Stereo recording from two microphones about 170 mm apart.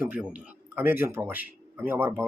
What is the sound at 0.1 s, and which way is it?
Speech, 10° right (ahead or behind).